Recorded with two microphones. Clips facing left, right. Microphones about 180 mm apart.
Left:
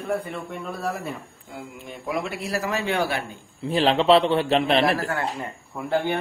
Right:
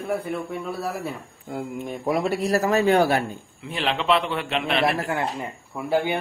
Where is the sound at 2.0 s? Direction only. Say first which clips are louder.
Right 5 dB; 40° right (ahead or behind).